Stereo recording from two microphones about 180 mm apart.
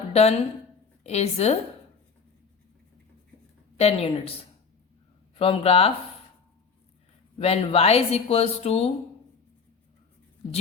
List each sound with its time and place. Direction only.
0.1 s a woman's voice: 35° left (ahead or behind)
3.8 s speech: 35° left (ahead or behind)
5.3 s speech: 30° left (ahead or behind)
7.3 s speech: 35° left (ahead or behind)